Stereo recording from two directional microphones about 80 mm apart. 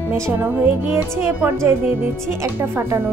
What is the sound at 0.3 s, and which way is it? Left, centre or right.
A woman's voice, right.